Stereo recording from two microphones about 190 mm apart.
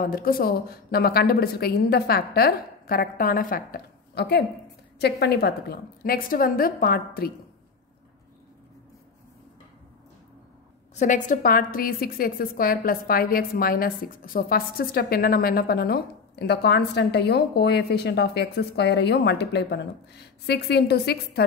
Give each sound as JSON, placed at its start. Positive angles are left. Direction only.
{"t": 0.0, "sound": "a woman's voice", "side_deg": 50}
{"t": 11.0, "sound": "a woman's voice", "side_deg": 40}